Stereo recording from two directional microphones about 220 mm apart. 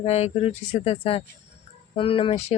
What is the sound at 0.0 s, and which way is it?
Speech, 30° left (ahead or behind).